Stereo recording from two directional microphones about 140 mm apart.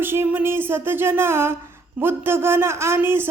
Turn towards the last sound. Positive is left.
turn(degrees=-15)  # may be behind; listen again after turning